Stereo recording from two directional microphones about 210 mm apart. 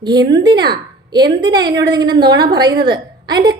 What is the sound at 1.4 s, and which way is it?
A woman's voice, 20° right (ahead or behind).